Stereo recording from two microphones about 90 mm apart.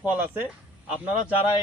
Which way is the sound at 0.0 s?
20° right (ahead or behind).